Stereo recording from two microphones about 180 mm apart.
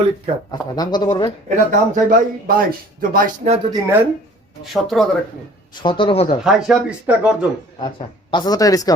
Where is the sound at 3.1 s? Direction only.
50° right (ahead or behind).